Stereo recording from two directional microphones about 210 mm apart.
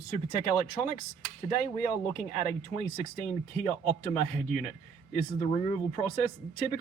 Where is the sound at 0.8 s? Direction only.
10° left (ahead or behind).